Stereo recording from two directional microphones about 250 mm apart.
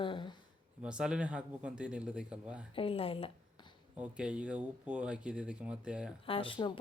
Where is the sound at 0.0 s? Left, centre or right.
Centre.